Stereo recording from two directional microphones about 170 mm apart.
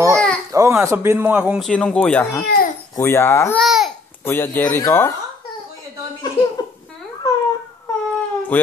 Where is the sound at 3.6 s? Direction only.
Centre (ahead or behind).